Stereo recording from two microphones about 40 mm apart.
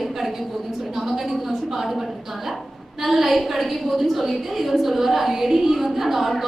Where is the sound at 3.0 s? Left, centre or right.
Centre.